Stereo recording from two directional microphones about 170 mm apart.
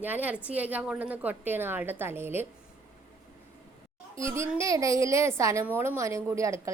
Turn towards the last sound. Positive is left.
turn(degrees=-15)  # may be behind; listen again after turning